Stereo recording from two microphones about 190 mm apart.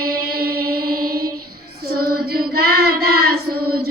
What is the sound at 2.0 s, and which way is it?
Child singing, 55° right (ahead or behind).